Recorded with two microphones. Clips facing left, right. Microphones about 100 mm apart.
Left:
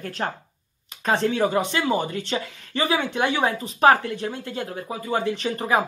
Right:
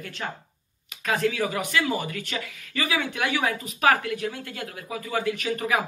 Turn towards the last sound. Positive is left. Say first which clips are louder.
# left 3 dB
turn(degrees=30)  # may be behind; listen again after turning